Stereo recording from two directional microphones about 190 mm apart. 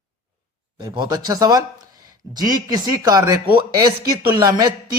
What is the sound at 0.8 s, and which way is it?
Speech, 20° right (ahead or behind).